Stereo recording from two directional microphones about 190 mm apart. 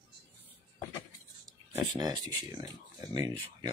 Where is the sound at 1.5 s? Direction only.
20° right (ahead or behind).